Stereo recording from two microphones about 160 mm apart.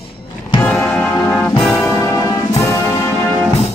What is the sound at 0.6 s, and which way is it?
Music, 10° left (ahead or behind).